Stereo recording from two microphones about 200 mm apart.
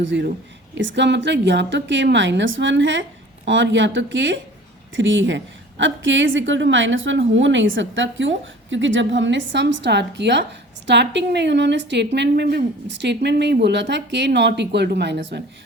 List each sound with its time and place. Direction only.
0.0 s a woman's voice: 60° right (ahead or behind)